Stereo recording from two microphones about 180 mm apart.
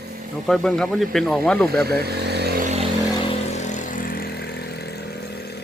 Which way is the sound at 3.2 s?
40° left (ahead or behind).